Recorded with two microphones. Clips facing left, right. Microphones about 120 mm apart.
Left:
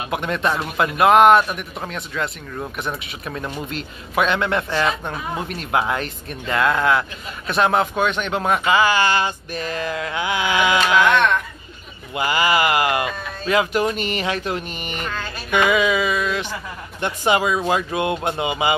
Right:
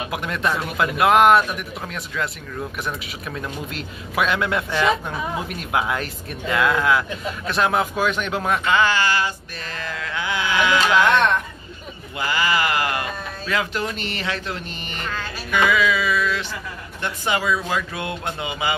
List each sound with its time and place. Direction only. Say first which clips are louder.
0.1 s a man's voice: left 4 dB; centre (ahead or behind); by 11.0 s 15° left (ahead or behind)
12.2 s speech: left 3 dB; 15° left (ahead or behind)